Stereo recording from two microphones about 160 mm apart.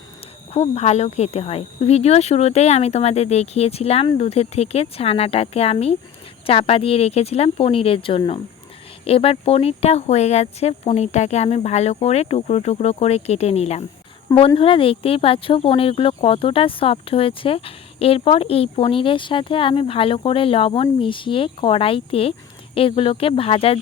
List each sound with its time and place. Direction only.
0.5 s speech: 40° left (ahead or behind)